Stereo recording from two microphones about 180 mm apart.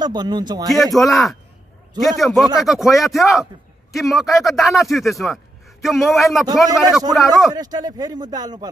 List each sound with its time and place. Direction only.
0.0 s speech: 25° right (ahead or behind)
0.9 s speech: centre (ahead or behind)
7.5 s speech: 20° right (ahead or behind)